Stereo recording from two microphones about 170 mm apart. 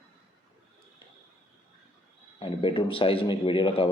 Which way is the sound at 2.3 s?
30° left (ahead or behind).